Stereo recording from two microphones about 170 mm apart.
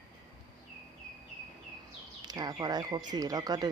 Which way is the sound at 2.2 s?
25° right (ahead or behind).